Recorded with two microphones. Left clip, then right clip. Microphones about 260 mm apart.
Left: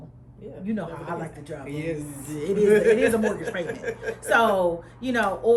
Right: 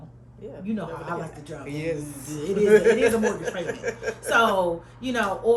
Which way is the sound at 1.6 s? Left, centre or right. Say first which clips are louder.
Right 2 dB; right.